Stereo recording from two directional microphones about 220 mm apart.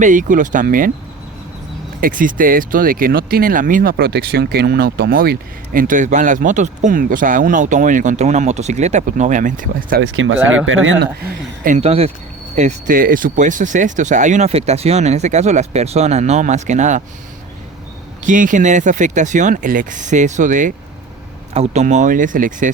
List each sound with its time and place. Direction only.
0.0 s speech: 35° right (ahead or behind)
2.0 s speech: 40° right (ahead or behind)
10.0 s speech: 65° right (ahead or behind)
11.2 s speech: 40° right (ahead or behind)
18.2 s speech: 35° right (ahead or behind)